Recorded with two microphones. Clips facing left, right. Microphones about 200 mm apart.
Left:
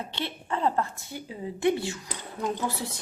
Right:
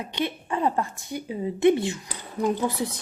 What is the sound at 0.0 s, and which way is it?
A woman's voice, 15° right (ahead or behind).